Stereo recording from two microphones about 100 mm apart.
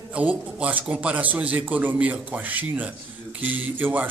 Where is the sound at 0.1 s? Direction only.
15° right (ahead or behind).